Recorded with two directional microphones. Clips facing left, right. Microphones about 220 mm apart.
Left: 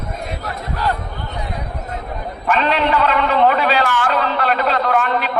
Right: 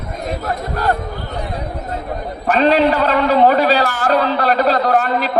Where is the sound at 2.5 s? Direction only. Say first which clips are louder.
Right 4 dB; 40° right (ahead or behind).